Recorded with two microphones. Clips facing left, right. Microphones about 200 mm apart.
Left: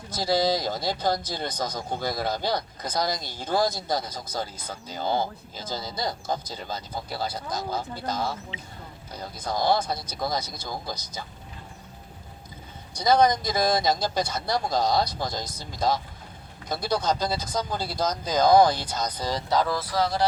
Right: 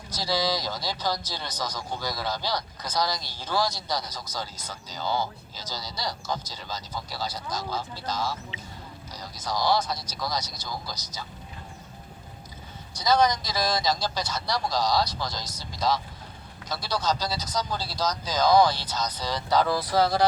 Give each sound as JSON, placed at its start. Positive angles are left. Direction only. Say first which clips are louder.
{"t": 0.1, "sound": "speech", "louder": "left 4 dB", "side_deg": 50}
{"t": 12.9, "sound": "speech", "louder": "left 2 dB", "side_deg": 55}
{"t": 19.9, "sound": "speech", "louder": "right 3 dB", "side_deg": -30}